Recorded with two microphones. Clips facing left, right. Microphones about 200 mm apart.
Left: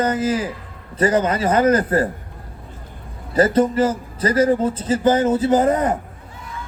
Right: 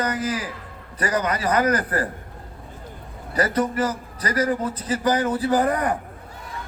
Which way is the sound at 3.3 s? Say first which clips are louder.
Left 6 dB; 25° left (ahead or behind).